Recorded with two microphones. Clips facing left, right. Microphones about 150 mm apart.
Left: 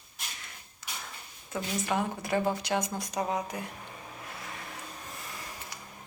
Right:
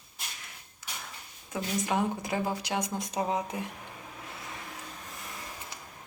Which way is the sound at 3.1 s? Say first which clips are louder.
Right 1 dB; 25° right (ahead or behind).